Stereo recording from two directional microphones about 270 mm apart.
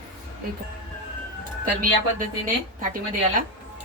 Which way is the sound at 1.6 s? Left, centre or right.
Right.